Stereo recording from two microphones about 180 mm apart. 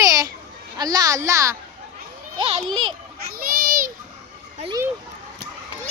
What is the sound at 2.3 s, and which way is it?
Speech, 30° right (ahead or behind).